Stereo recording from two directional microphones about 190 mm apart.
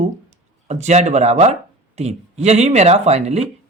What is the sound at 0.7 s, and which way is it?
Speech, 35° right (ahead or behind).